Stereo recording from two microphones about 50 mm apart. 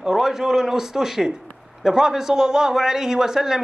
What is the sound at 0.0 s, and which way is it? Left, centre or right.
A man's voice, centre.